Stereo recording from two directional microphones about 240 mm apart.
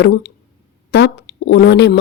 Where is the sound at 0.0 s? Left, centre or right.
Left.